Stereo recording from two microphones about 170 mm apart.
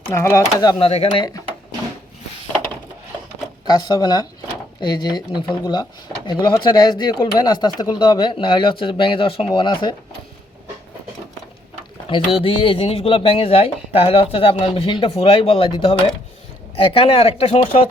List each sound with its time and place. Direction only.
0.1 s speech: 15° left (ahead or behind)
3.7 s speech: 25° left (ahead or behind)
12.4 s speech: 30° left (ahead or behind)